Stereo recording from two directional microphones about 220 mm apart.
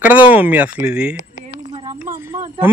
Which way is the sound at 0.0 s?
5° right (ahead or behind).